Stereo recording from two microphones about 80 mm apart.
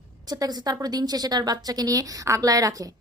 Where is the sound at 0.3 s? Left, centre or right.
Right.